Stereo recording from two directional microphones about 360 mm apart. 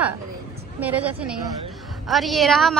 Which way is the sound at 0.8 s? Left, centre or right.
Centre.